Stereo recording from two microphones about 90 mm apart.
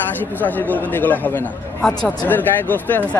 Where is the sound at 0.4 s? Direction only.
20° left (ahead or behind).